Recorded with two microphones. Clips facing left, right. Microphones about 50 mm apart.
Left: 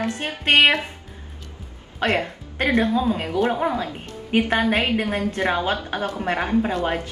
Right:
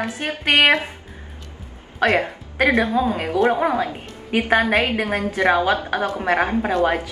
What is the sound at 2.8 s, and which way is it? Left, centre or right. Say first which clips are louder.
A woman's voice: right 1 dB; right.